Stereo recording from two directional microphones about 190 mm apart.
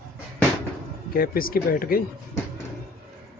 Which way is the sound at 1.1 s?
50° left (ahead or behind).